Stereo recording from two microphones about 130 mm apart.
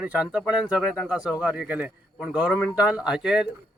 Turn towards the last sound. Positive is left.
turn(degrees=-5)  # may be behind; listen again after turning